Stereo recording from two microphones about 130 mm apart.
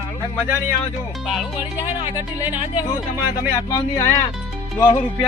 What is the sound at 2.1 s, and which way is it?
Speech, 15° right (ahead or behind).